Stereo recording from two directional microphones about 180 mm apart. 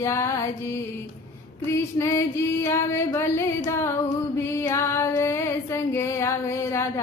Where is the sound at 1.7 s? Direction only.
15° left (ahead or behind).